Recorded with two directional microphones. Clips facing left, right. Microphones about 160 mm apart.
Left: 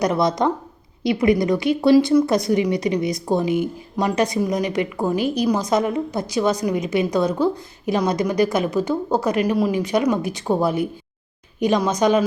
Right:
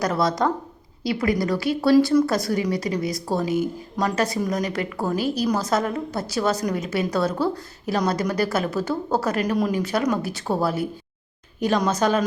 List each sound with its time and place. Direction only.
0.0 s a woman's voice: 20° left (ahead or behind)